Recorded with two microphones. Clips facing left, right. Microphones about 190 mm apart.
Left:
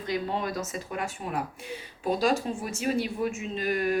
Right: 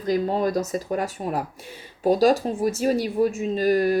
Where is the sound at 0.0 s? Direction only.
40° right (ahead or behind).